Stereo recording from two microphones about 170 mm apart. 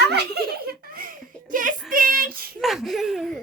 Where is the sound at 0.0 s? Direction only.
70° right (ahead or behind); by 1.7 s 50° right (ahead or behind).